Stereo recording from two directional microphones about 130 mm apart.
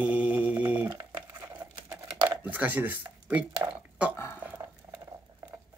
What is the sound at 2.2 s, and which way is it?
Speech, 10° right (ahead or behind).